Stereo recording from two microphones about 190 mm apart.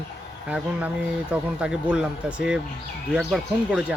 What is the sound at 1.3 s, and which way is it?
Speech, 5° right (ahead or behind).